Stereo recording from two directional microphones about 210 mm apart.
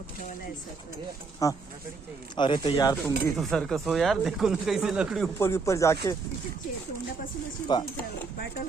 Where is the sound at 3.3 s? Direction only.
Centre (ahead or behind).